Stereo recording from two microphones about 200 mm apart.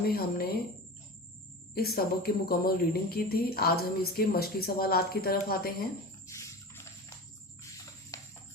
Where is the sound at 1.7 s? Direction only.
50° left (ahead or behind).